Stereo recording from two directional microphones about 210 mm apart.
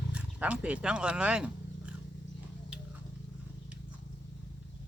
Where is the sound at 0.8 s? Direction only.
5° right (ahead or behind).